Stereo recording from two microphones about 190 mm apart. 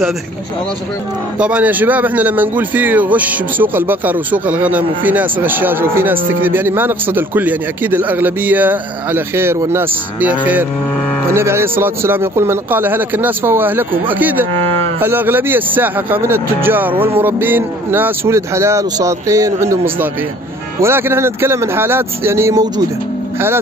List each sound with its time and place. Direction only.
1.4 s a man's voice: 5° right (ahead or behind)